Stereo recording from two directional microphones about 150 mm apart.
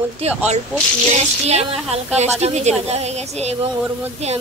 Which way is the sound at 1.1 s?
45° right (ahead or behind).